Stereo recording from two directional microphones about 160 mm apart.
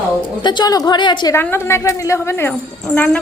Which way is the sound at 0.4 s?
25° left (ahead or behind).